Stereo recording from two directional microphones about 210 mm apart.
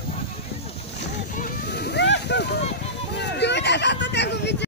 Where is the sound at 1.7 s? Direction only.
50° left (ahead or behind).